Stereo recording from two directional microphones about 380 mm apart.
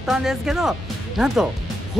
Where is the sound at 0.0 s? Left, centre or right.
Centre.